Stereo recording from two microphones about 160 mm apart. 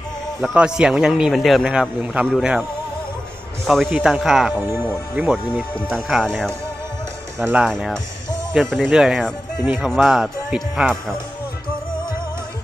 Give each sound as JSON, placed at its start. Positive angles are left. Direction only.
{"t": 0.4, "sound": "a man's voice", "side_deg": 0}
{"t": 3.6, "sound": "a man's voice", "side_deg": 0}
{"t": 5.8, "sound": "a man's voice", "side_deg": 5}
{"t": 7.3, "sound": "speech", "side_deg": -10}
{"t": 7.7, "sound": "a man's voice", "side_deg": 5}